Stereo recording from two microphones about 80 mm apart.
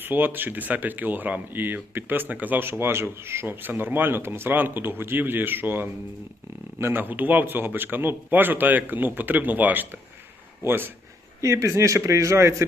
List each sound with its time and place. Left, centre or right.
0.0 s speech: right
11.3 s speech: right